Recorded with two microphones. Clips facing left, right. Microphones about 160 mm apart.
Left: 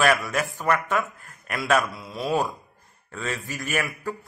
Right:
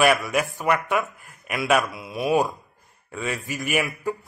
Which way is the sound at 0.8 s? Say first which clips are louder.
Right 1 dB; 15° right (ahead or behind).